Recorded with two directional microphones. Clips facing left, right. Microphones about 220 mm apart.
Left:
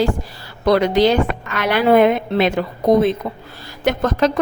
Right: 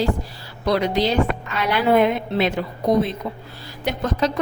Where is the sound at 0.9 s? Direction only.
80° left.